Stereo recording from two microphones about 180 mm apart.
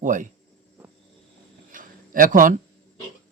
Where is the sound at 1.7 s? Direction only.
50° right (ahead or behind).